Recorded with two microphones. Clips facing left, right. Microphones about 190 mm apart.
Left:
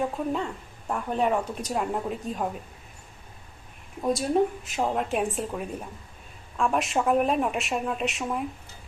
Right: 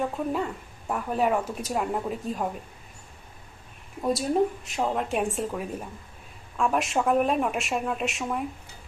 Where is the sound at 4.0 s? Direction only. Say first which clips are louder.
Even; centre (ahead or behind).